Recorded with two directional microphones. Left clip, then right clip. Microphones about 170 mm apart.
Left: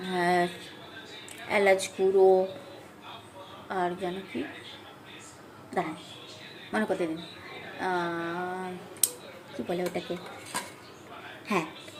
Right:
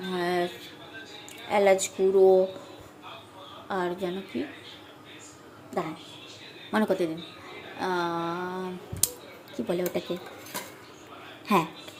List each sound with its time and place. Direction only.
0.1 s a sound: 5° right (ahead or behind)
1.5 s speech: 5° right (ahead or behind)
3.7 s speech: 15° right (ahead or behind)
5.8 s a woman's voice: 5° right (ahead or behind)
6.7 s speech: 20° right (ahead or behind)
11.4 s speech: 20° right (ahead or behind)